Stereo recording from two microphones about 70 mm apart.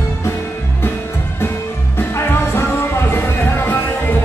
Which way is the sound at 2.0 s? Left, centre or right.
Left.